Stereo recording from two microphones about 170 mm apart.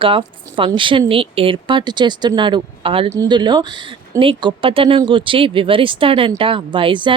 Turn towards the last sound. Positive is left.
turn(degrees=-30)  # may be behind; listen again after turning